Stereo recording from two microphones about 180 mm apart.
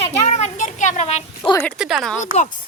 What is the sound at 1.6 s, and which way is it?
Speech, centre (ahead or behind).